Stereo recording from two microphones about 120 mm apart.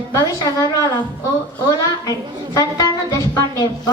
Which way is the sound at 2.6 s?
30° left (ahead or behind).